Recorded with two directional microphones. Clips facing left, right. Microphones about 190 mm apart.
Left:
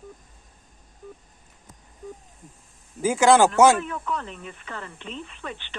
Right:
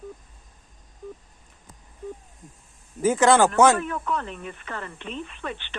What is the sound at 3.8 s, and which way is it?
A woman's voice, 50° right (ahead or behind).